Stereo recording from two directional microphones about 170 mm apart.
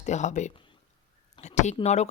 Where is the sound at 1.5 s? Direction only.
45° left (ahead or behind).